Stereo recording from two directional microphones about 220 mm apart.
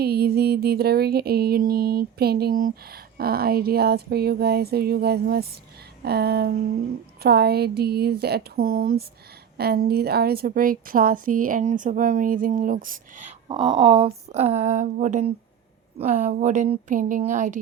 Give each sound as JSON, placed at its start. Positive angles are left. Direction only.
{"t": 0.0, "sound": "music", "side_deg": -45}
{"t": 9.6, "sound": "a woman's voice", "side_deg": -45}
{"t": 13.5, "sound": "a woman's voice", "side_deg": -20}